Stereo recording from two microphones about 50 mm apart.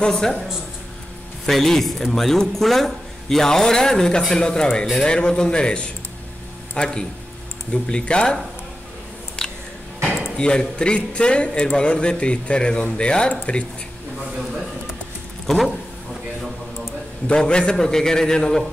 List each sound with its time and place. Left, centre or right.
0.0 s a man's voice: centre
1.4 s a man's voice: centre
10.3 s a man's voice: centre
15.4 s a sound: centre
17.3 s a man's voice: centre